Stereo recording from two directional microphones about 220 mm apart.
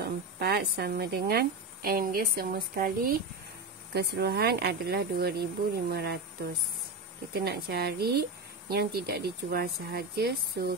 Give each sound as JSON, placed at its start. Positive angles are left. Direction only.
{"t": 0.0, "sound": "speech", "side_deg": -45}
{"t": 7.3, "sound": "speech", "side_deg": -45}